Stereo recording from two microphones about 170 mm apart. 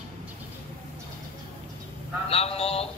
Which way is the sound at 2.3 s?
35° left (ahead or behind).